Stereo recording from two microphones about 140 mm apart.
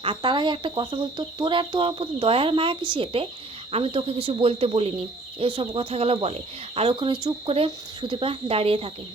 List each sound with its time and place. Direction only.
0.0 s speech: 35° right (ahead or behind)